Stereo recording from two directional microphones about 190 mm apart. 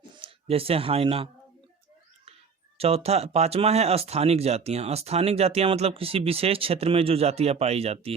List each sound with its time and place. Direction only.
0.2 s speech: 30° right (ahead or behind)
2.7 s speech: 30° right (ahead or behind)